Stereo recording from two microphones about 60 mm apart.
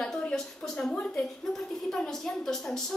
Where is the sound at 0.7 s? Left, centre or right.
Centre.